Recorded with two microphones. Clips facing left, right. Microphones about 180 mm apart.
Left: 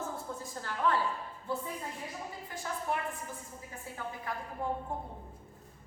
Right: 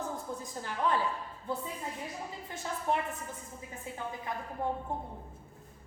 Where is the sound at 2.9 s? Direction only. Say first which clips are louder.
Right 5 dB; 25° right (ahead or behind).